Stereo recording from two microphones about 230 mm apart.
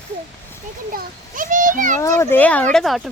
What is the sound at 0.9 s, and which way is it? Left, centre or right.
A child's voice, right.